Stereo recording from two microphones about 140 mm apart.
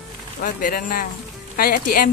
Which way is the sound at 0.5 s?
80° left.